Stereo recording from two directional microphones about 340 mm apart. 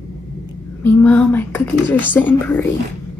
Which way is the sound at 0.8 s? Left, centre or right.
Centre.